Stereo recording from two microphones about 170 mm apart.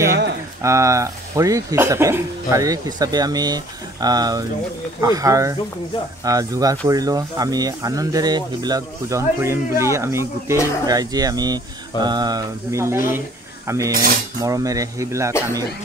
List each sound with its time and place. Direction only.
0.6 s speech: 15° right (ahead or behind)
13.7 s cutlery: 20° right (ahead or behind)
14.4 s speech: 20° right (ahead or behind)